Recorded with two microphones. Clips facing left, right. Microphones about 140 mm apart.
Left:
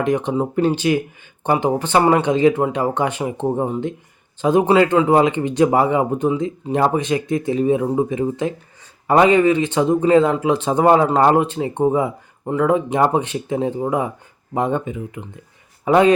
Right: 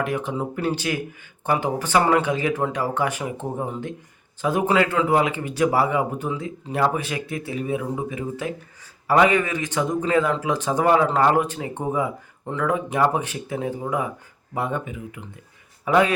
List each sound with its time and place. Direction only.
0.0 s speech: 25° left (ahead or behind)
10.8 s speech: 30° left (ahead or behind)